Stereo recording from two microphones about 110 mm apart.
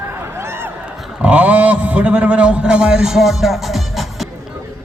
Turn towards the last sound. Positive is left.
turn(degrees=0)  # may be behind; listen again after turning